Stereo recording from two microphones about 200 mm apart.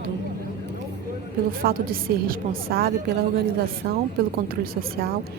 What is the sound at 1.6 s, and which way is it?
Speech, 45° right (ahead or behind).